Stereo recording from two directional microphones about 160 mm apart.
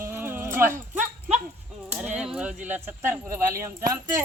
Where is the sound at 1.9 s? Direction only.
5° right (ahead or behind).